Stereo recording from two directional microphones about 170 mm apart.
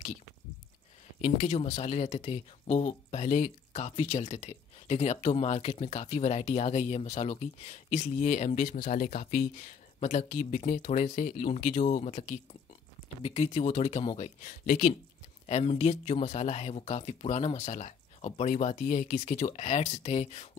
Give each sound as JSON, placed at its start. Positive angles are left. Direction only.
{"t": 1.2, "sound": "speech", "side_deg": 45}
{"t": 15.4, "sound": "speech", "side_deg": 40}